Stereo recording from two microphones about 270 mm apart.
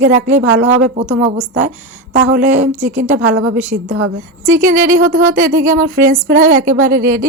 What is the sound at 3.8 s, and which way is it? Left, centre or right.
Speech, right.